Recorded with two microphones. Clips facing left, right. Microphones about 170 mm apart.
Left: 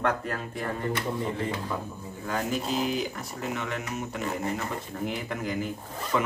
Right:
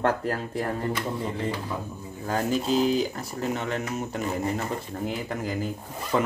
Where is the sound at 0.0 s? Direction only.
35° right (ahead or behind).